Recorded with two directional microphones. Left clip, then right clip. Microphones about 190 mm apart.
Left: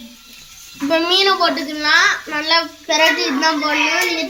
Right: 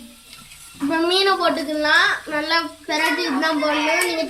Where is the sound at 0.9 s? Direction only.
10° left (ahead or behind).